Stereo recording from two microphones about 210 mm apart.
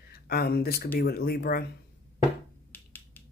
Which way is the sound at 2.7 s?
10° left (ahead or behind).